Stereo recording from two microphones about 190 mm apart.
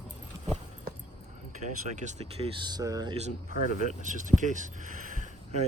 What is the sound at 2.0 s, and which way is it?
Speech, 35° right (ahead or behind).